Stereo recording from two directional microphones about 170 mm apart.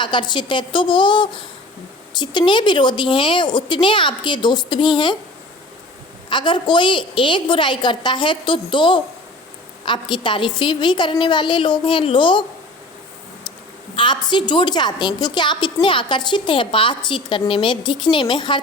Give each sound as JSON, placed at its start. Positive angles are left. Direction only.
{"t": 0.0, "sound": "a woman's voice", "side_deg": 25}
{"t": 6.2, "sound": "a woman's voice", "side_deg": 25}
{"t": 13.9, "sound": "a woman's voice", "side_deg": 30}